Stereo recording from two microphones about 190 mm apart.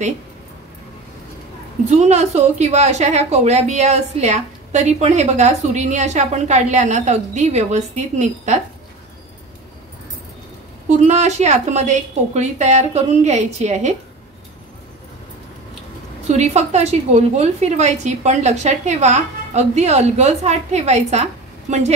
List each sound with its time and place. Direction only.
2.0 s a woman's voice: 35° right (ahead or behind)
10.9 s a woman's voice: 35° right (ahead or behind)
16.3 s a woman's voice: 35° right (ahead or behind)